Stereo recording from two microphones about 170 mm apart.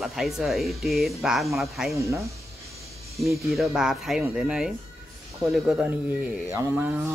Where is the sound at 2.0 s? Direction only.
15° right (ahead or behind).